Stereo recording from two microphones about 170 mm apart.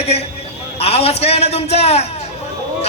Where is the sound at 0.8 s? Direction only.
35° left (ahead or behind).